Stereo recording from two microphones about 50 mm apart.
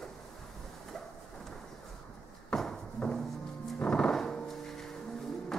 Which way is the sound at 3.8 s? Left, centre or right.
Centre.